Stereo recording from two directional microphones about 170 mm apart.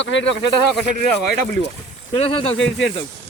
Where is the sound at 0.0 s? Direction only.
90° left.